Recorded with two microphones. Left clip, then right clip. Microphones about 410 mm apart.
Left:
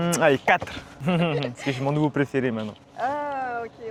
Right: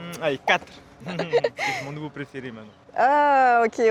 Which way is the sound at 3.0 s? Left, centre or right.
Right.